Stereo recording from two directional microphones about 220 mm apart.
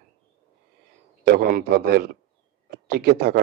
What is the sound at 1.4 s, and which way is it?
Speech, 40° right (ahead or behind).